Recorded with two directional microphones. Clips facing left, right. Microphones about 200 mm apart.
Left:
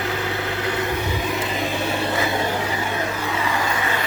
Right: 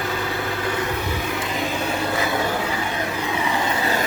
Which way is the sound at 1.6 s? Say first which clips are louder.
Left 1 dB; 30° left (ahead or behind).